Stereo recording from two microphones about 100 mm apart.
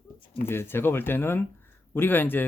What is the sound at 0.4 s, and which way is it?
Speech, 25° left (ahead or behind).